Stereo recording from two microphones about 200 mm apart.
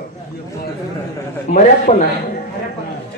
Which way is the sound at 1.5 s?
30° left (ahead or behind).